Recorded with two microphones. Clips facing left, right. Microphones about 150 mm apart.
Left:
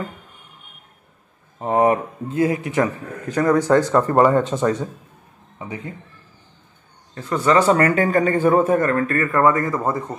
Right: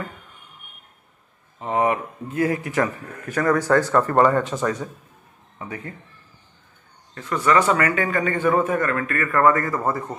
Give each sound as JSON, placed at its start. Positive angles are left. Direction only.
{"t": 1.6, "sound": "a man's voice", "side_deg": 40}
{"t": 2.2, "sound": "speech", "side_deg": 20}
{"t": 7.2, "sound": "a man's voice", "side_deg": 30}